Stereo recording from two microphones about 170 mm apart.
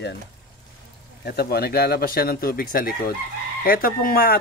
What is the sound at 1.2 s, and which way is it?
Speech, 65° left (ahead or behind).